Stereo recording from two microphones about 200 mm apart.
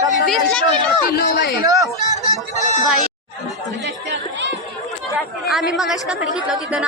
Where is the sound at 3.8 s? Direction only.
60° right (ahead or behind).